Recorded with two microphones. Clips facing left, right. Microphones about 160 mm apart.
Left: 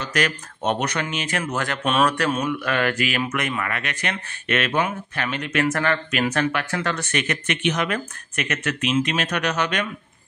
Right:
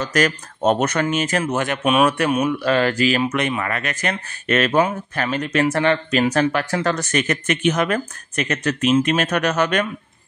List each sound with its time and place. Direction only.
0.0 s speech: 40° right (ahead or behind)
1.4 s speech: 20° right (ahead or behind)
3.7 s speech: 40° right (ahead or behind)